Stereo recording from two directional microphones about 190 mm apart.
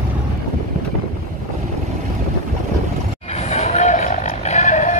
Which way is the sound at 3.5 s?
35° left (ahead or behind).